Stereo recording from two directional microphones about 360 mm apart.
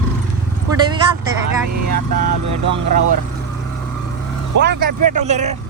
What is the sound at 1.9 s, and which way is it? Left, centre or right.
Speech, right.